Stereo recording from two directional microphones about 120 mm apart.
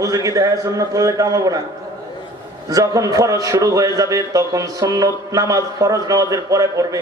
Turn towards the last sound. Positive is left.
turn(degrees=-30)  # may be behind; listen again after turning